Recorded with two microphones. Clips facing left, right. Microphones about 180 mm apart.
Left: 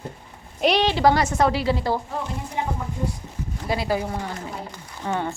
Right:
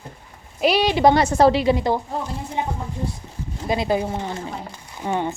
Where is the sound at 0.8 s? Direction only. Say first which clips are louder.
Right 3 dB; 20° right (ahead or behind).